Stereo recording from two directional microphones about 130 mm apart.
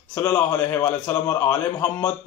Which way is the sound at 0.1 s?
15° left (ahead or behind).